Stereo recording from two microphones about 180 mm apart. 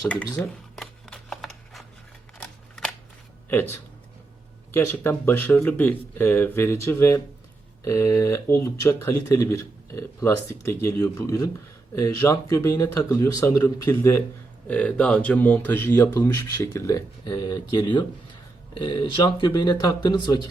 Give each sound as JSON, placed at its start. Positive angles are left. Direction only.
{"t": 0.3, "sound": "shuffling cards", "side_deg": 5}
{"t": 2.4, "sound": "scissors", "side_deg": 5}
{"t": 3.5, "sound": "speech", "side_deg": 10}